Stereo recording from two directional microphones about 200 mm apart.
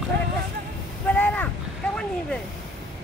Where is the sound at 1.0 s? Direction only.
10° left (ahead or behind).